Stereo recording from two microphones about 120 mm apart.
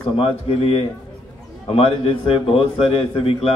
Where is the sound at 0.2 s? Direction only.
55° left (ahead or behind).